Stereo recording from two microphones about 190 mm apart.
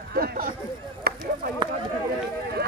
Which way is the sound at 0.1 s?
55° right (ahead or behind).